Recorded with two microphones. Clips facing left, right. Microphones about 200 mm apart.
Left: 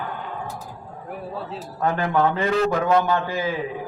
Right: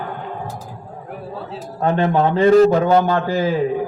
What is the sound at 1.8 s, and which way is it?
A man's voice, 25° right (ahead or behind).